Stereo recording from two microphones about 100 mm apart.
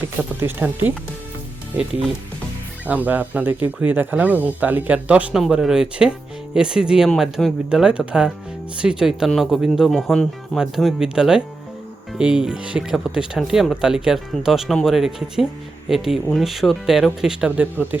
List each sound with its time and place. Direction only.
0.2 s speech: 20° right (ahead or behind)
2.8 s speech: 15° right (ahead or behind)